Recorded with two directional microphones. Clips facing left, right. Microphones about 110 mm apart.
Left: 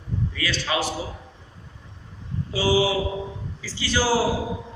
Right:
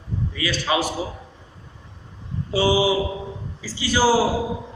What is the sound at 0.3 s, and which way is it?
Speech, 15° right (ahead or behind).